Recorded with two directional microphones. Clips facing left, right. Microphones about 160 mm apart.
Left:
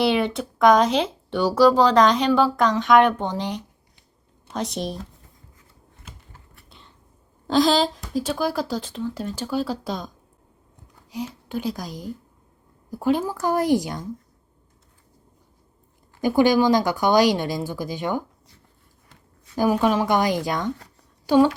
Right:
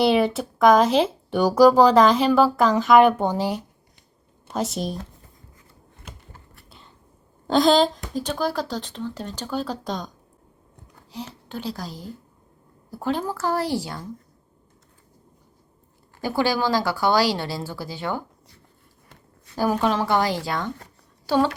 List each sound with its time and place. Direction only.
0.0 s speech: centre (ahead or behind)
6.7 s a sound: centre (ahead or behind)
7.4 s speech: centre (ahead or behind)
11.1 s speech: 10° left (ahead or behind)
16.2 s speech: 15° left (ahead or behind)
19.5 s speech: 10° left (ahead or behind)